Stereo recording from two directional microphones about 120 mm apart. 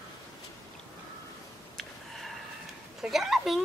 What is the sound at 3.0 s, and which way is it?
Speech, centre (ahead or behind).